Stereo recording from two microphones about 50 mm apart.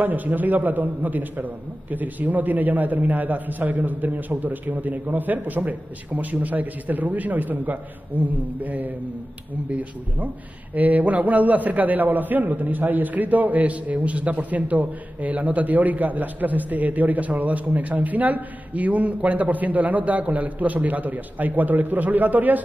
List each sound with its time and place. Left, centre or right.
0.0 s a man's voice: right